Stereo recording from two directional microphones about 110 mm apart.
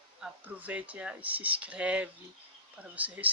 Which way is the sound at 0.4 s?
15° right (ahead or behind).